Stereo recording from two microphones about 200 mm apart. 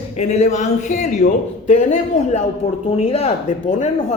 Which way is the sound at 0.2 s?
35° left (ahead or behind).